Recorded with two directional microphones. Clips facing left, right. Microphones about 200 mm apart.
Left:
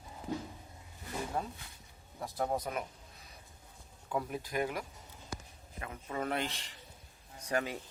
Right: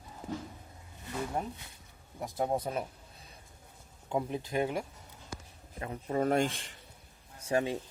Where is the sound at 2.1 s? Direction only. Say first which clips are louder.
Right 3 dB; 20° right (ahead or behind).